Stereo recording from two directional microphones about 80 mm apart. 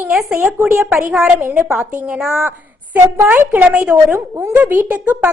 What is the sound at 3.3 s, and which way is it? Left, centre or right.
A woman's voice, right.